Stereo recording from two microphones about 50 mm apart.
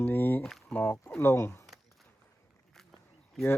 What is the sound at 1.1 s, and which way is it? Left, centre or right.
Speech, left.